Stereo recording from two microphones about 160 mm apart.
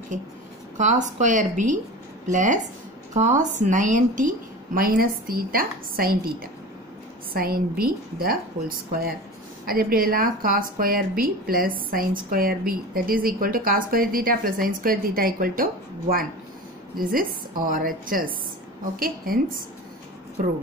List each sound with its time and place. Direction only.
0.7 s a woman's voice: 50° right (ahead or behind); by 19.4 s 65° right (ahead or behind)